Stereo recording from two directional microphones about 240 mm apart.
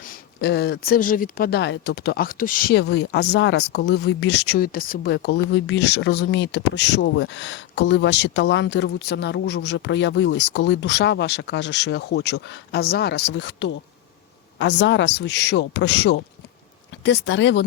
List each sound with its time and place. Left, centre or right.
0.0 s speech: left